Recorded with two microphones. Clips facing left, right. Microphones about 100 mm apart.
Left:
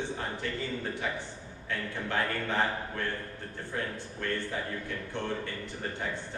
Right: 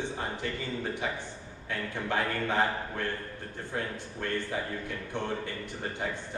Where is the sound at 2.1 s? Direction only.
20° right (ahead or behind).